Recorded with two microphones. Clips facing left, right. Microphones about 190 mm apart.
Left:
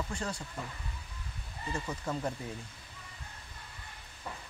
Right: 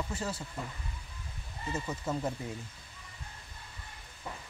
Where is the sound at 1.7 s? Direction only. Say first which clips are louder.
Right 1 dB; 5° right (ahead or behind).